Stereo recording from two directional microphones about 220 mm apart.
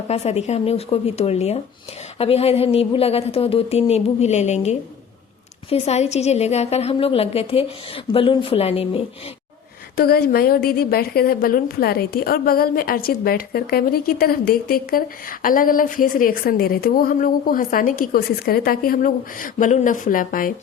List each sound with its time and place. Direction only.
0.1 s a woman's voice: 30° left (ahead or behind)
10.0 s a woman's voice: 45° left (ahead or behind)